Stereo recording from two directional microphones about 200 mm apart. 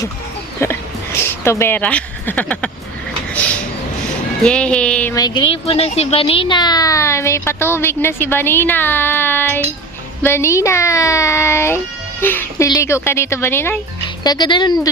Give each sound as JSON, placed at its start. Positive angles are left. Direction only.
{"t": 0.6, "sound": "speech", "side_deg": 10}
{"t": 4.4, "sound": "speech", "side_deg": 5}
{"t": 5.1, "sound": "speech", "side_deg": 20}
{"t": 14.3, "sound": "speech", "side_deg": 20}